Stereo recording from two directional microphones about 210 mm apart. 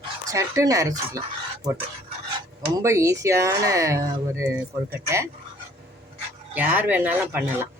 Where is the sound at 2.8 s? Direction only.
15° right (ahead or behind).